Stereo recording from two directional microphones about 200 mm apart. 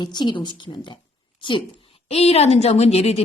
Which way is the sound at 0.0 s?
20° left (ahead or behind).